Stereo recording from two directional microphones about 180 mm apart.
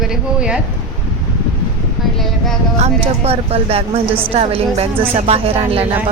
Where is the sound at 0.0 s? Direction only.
5° right (ahead or behind).